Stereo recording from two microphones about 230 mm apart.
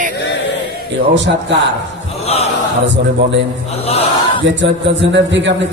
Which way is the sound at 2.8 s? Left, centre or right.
Right.